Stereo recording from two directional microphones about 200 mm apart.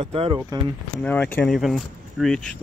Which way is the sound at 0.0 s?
30° right (ahead or behind).